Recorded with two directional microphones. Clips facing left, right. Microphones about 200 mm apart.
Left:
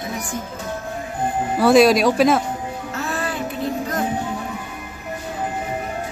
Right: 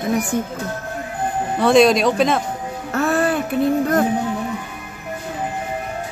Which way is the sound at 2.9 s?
60° right (ahead or behind).